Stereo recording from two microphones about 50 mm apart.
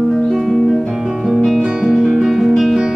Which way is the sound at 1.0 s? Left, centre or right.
Centre.